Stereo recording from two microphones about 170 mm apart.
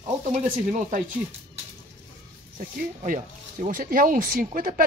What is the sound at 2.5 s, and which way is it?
Speech, 50° right (ahead or behind).